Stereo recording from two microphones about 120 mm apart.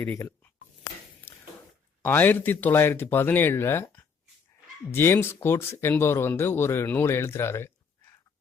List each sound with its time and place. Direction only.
0.0 s speech: 20° left (ahead or behind)
1.2 s a sound: 15° left (ahead or behind)
2.0 s speech: 15° left (ahead or behind)